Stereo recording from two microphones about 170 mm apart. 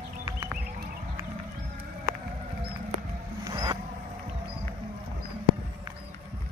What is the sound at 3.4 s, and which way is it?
Vehicle, 20° right (ahead or behind).